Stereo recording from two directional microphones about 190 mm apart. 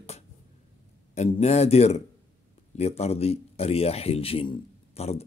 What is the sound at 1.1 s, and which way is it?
Speech, 35° left (ahead or behind).